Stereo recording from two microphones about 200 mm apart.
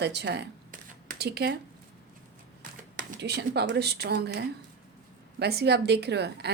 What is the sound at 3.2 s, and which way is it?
Speech, 55° right (ahead or behind).